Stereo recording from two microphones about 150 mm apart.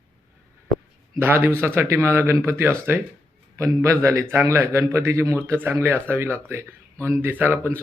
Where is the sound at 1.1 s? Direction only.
15° right (ahead or behind).